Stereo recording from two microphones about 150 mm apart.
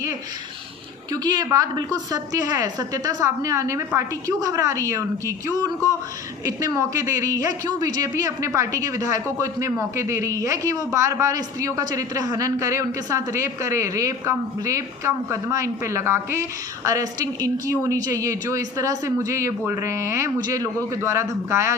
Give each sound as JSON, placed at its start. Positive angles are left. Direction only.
{"t": 1.1, "sound": "a woman's voice", "side_deg": -30}